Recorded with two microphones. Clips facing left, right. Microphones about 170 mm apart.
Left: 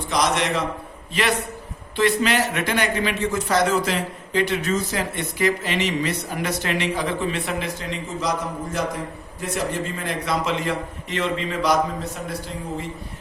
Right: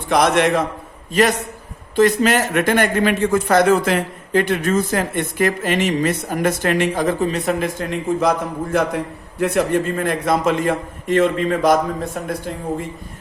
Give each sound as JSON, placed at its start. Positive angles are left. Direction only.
{"t": 0.1, "sound": "a man's voice", "side_deg": -55}
{"t": 1.1, "sound": "speech", "side_deg": -45}